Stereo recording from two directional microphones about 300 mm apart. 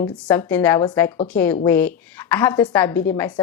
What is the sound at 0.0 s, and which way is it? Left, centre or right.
A woman's voice, centre.